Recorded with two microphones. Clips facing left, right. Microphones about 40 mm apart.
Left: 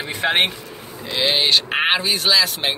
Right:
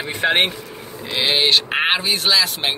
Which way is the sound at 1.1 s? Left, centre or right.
Centre.